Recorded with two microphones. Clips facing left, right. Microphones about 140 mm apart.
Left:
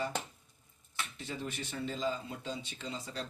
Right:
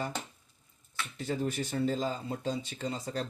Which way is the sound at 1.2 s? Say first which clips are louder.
Right 10 dB; 45° right (ahead or behind).